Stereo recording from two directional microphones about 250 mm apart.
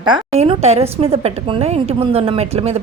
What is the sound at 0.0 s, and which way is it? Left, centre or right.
A woman's voice, centre.